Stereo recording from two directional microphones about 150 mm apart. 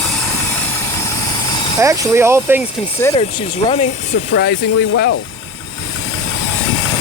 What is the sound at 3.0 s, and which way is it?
Speech, 15° left (ahead or behind).